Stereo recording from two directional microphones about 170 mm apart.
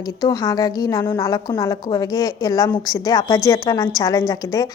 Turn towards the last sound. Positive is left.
turn(degrees=20)  # may be behind; listen again after turning